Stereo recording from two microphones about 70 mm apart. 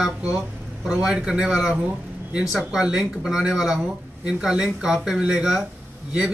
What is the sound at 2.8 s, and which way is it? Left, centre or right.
Speech, centre.